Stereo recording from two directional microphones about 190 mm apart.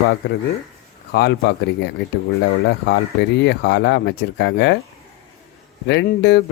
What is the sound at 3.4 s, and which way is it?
Speech, 65° left (ahead or behind).